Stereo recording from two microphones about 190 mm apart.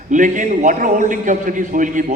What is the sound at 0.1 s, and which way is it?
A man's voice, 40° right (ahead or behind).